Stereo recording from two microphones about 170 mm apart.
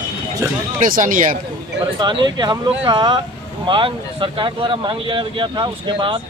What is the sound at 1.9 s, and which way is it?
Speech, 25° right (ahead or behind).